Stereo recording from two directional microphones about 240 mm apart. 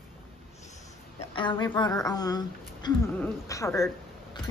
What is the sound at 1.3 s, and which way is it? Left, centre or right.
A woman's voice, centre.